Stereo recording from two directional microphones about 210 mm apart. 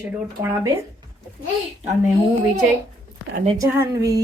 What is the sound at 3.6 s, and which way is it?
Speech, 15° right (ahead or behind).